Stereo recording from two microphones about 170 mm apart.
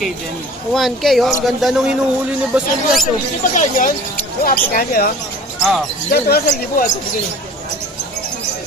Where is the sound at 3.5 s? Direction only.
45° left (ahead or behind).